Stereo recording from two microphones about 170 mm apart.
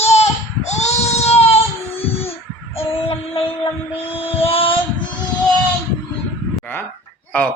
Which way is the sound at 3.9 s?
35° left (ahead or behind).